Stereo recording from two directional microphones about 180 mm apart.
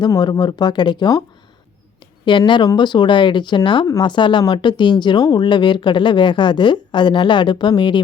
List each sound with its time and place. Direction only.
0.0 s speech: 25° left (ahead or behind)
2.2 s speech: 25° left (ahead or behind)